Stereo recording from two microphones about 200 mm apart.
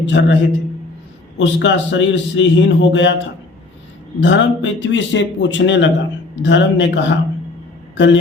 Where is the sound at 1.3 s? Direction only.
65° left (ahead or behind).